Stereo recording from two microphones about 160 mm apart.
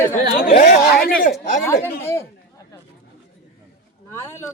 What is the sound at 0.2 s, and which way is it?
Chatter, 50° left (ahead or behind).